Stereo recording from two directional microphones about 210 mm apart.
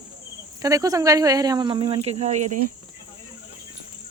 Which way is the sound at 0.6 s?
15° right (ahead or behind).